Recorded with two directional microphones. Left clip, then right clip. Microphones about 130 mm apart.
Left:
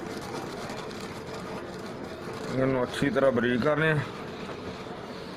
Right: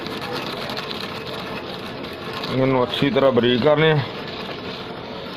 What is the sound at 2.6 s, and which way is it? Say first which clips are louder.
Speech: right 8 dB; 40° right (ahead or behind).